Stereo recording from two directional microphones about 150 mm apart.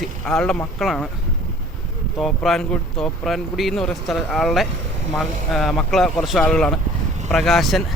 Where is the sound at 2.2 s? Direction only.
Centre (ahead or behind).